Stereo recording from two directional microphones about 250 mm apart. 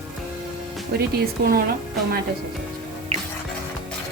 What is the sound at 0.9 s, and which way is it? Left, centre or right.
Speech, right.